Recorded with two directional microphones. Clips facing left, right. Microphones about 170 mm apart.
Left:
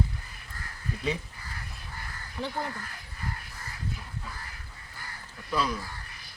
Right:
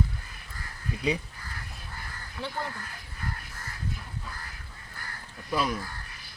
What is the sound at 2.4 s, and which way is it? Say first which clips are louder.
Speech: left 2 dB; 20° left (ahead or behind).